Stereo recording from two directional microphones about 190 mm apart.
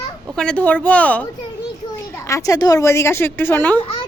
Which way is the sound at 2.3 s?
15° left (ahead or behind).